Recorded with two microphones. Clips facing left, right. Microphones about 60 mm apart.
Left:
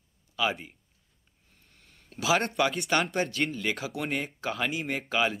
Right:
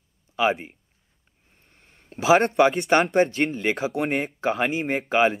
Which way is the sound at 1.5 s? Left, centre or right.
Right.